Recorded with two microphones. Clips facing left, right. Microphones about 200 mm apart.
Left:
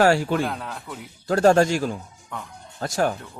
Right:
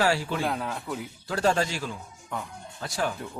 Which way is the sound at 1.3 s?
50° left (ahead or behind).